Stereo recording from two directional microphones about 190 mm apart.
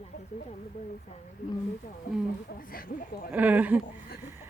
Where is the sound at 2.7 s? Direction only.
50° left (ahead or behind).